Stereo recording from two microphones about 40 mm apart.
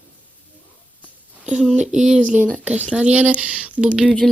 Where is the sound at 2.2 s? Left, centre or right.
Right.